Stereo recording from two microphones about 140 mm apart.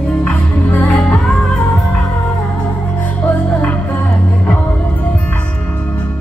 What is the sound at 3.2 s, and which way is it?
Music, 10° left (ahead or behind).